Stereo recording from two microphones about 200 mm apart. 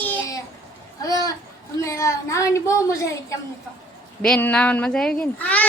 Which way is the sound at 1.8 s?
15° left (ahead or behind).